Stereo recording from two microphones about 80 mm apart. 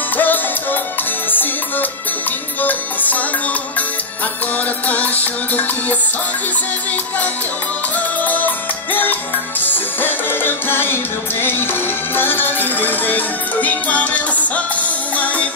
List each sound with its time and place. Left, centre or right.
0.2 s music: left
4.8 s music: left
8.2 s music: left